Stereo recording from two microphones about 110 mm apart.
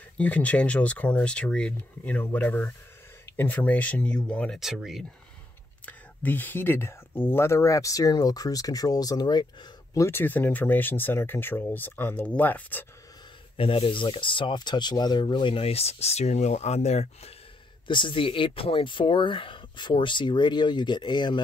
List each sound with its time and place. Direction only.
0.2 s speech: 10° left (ahead or behind)
4.6 s speech: 5° right (ahead or behind)
5.9 s speech: 15° left (ahead or behind); by 10.0 s 40° left (ahead or behind)
10.0 s speech: 20° left (ahead or behind)
13.6 s speech: 55° left (ahead or behind); by 17.3 s 75° left (ahead or behind)
17.8 s speech: 45° left (ahead or behind)